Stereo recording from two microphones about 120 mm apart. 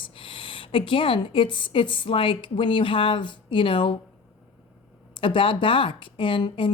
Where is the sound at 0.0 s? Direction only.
45° left (ahead or behind).